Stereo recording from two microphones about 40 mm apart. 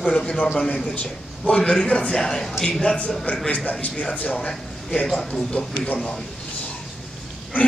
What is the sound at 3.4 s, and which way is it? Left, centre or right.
Speech, left.